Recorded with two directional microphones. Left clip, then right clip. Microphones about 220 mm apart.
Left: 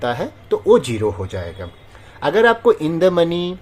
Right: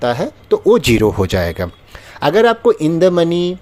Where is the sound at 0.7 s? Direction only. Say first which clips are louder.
Right 1 dB; 40° right (ahead or behind).